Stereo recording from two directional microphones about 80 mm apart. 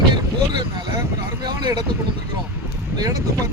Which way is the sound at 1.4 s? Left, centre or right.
Right.